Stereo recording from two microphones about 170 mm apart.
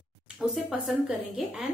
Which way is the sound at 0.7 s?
5° right (ahead or behind).